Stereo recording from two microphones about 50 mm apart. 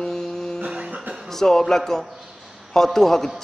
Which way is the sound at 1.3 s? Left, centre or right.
Centre.